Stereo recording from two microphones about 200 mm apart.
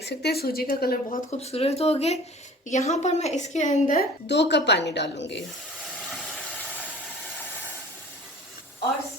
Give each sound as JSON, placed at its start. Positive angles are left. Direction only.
{"t": 0.0, "sound": "a woman's voice", "side_deg": 55}
{"t": 1.4, "sound": "a woman's voice", "side_deg": 30}
{"t": 4.3, "sound": "a woman's voice", "side_deg": 60}